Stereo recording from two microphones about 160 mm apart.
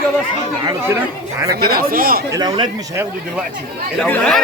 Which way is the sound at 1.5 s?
70° right (ahead or behind).